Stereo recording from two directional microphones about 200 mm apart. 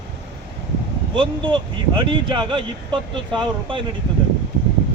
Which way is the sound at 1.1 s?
25° right (ahead or behind).